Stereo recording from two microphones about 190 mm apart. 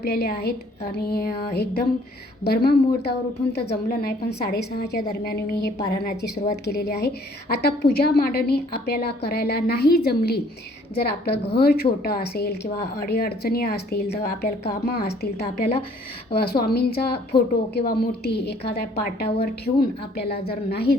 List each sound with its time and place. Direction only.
0.0 s a woman's voice: 55° left (ahead or behind)